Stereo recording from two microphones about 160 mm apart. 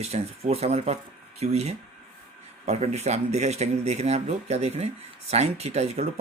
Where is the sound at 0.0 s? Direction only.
40° right (ahead or behind).